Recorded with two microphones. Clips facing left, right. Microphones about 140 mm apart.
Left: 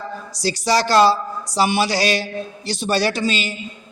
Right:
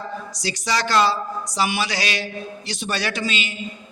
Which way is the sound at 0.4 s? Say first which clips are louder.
Left 6 dB; 35° left (ahead or behind).